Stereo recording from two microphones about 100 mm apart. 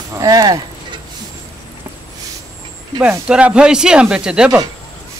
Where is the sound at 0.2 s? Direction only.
40° right (ahead or behind).